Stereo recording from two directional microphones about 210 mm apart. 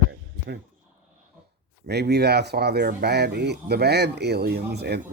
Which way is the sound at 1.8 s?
50° right (ahead or behind).